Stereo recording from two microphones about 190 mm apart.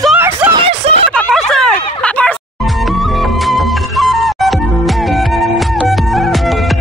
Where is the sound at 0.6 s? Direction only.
30° right (ahead or behind).